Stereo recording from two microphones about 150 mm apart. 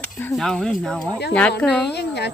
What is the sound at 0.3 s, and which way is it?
Speech, 5° left (ahead or behind).